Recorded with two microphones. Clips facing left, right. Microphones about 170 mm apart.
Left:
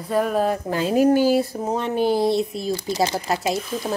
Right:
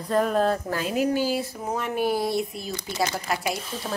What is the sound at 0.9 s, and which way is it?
Speech, 45° left (ahead or behind).